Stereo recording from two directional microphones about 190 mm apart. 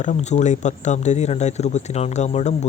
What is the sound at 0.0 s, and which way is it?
Speech, 40° left (ahead or behind).